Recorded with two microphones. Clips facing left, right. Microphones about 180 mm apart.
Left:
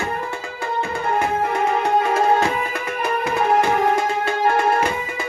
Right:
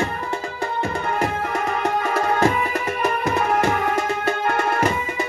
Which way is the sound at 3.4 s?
35° left (ahead or behind).